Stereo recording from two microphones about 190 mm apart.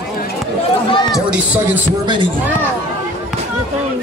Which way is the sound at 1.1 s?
5° right (ahead or behind).